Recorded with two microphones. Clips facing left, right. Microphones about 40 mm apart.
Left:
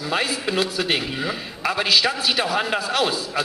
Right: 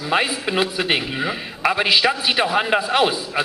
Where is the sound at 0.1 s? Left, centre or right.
Right.